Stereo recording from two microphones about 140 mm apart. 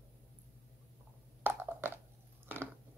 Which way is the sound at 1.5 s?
15° right (ahead or behind).